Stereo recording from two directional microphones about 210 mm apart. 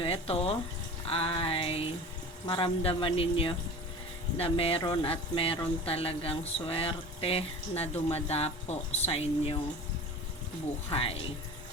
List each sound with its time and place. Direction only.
0.0 s speech: 25° left (ahead or behind)
10.8 s speech: 25° left (ahead or behind)